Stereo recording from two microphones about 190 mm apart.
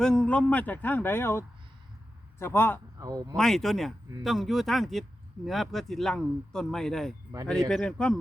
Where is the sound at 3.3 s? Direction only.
Centre (ahead or behind).